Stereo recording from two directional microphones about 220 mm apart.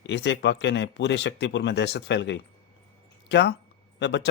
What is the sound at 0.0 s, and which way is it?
Speech, 55° left (ahead or behind).